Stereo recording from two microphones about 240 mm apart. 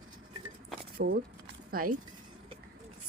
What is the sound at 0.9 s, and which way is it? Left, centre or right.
Speech, right.